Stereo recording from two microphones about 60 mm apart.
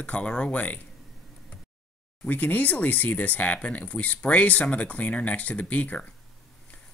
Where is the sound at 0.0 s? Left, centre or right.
Left.